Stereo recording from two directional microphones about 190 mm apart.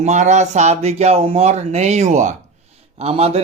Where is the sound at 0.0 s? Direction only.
40° right (ahead or behind).